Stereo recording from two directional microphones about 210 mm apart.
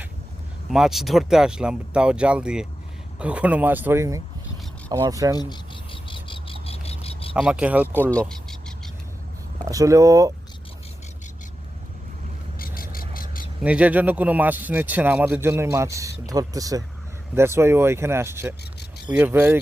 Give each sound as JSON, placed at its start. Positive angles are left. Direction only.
{"t": 0.7, "sound": "a man's voice", "side_deg": 0}
{"t": 5.3, "sound": "cricket", "side_deg": 20}
{"t": 7.3, "sound": "speech", "side_deg": -5}
{"t": 8.1, "sound": "a sound", "side_deg": 0}
{"t": 9.6, "sound": "a man's voice", "side_deg": -15}
{"t": 12.5, "sound": "a sound", "side_deg": 40}
{"t": 13.6, "sound": "a man's voice", "side_deg": -5}